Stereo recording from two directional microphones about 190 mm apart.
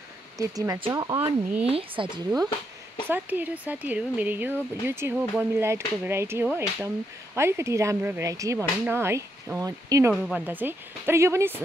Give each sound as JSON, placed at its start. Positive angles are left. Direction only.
{"t": 0.4, "sound": "speech", "side_deg": -20}
{"t": 3.1, "sound": "speech", "side_deg": -10}
{"t": 10.1, "sound": "speech", "side_deg": -5}